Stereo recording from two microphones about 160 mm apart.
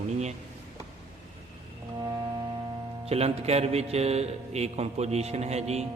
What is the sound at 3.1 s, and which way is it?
A man's voice, 40° right (ahead or behind).